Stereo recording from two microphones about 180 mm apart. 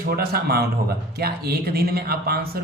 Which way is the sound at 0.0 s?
60° right (ahead or behind).